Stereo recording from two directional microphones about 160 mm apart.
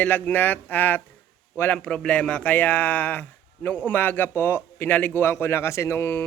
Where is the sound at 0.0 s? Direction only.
10° left (ahead or behind).